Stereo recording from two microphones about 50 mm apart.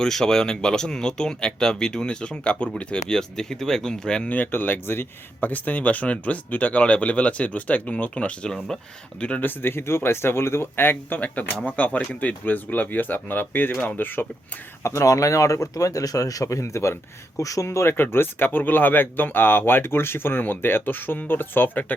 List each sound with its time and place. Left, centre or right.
0.0 s speech: centre
4.3 s speech: left
9.4 s speech: left
11.6 s speech: left
14.8 s speech: left
17.9 s speech: left